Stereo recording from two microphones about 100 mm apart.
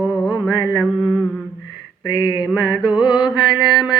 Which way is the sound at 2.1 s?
55° left (ahead or behind).